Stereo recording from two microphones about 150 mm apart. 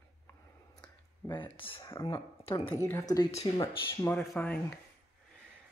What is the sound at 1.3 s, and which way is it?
Speech, 35° left (ahead or behind).